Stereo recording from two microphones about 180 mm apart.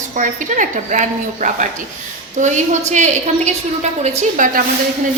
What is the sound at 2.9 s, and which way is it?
A woman's voice, 40° right (ahead or behind).